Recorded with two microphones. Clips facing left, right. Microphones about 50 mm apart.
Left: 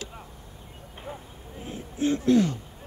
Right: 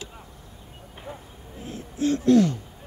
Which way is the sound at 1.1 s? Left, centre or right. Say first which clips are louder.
Even; left.